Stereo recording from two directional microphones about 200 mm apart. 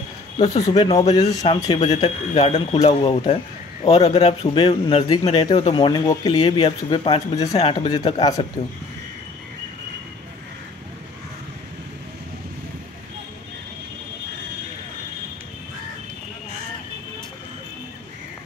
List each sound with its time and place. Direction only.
0.5 s speech: 15° left (ahead or behind)
1.8 s speech: 35° left (ahead or behind)